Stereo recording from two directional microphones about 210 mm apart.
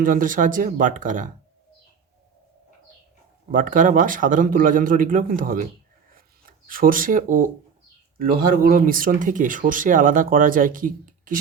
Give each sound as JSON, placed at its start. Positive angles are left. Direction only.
{"t": 0.0, "sound": "speech", "side_deg": -40}
{"t": 3.5, "sound": "speech", "side_deg": -40}